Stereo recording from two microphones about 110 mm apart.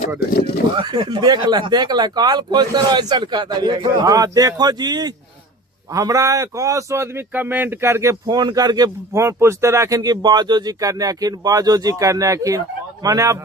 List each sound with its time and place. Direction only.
0.8 s a man's voice: 45° right (ahead or behind); by 8.1 s 25° right (ahead or behind)
8.3 s speech: 40° right (ahead or behind)